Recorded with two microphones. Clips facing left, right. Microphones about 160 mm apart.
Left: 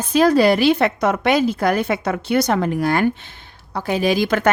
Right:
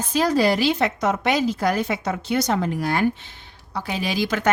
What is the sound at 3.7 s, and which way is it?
Speech, 50° left (ahead or behind).